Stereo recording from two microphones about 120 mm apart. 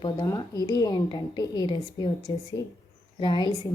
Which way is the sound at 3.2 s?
40° left (ahead or behind).